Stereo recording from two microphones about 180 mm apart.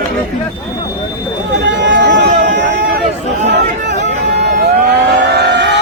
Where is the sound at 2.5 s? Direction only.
55° right (ahead or behind).